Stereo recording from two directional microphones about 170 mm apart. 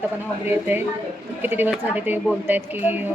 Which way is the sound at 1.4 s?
10° right (ahead or behind).